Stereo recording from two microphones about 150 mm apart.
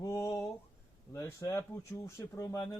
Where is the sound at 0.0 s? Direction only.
20° left (ahead or behind).